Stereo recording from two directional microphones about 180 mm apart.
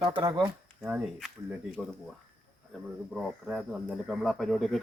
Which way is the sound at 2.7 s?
5° right (ahead or behind).